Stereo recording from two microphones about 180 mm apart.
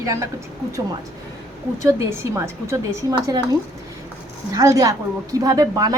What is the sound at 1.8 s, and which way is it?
A woman's voice, 15° right (ahead or behind).